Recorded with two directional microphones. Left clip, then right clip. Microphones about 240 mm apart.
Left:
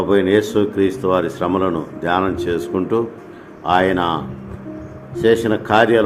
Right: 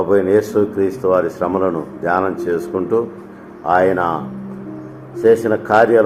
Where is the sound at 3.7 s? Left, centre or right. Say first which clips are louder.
Right 2 dB; left.